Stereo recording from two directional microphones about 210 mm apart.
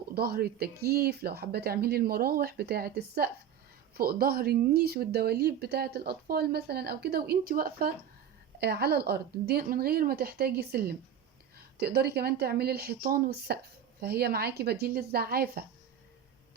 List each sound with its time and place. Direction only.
0.1 s speech: 45° right (ahead or behind)